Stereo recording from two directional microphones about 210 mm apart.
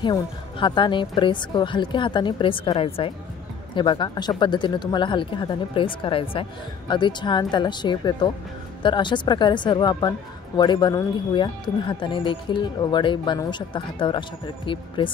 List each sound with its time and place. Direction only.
0.0 s speech: 20° left (ahead or behind)